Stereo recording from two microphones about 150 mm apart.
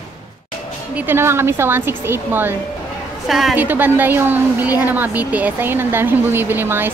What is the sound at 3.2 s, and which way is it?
Speech, centre (ahead or behind).